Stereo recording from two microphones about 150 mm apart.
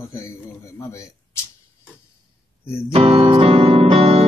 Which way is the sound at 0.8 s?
20° left (ahead or behind).